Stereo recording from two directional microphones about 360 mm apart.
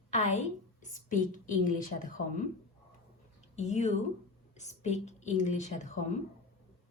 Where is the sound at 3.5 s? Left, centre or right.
Centre.